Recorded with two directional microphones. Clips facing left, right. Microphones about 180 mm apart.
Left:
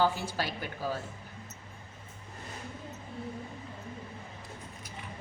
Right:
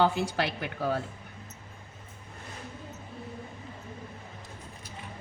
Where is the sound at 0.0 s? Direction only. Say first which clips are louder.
Right 3 dB; 75° right (ahead or behind).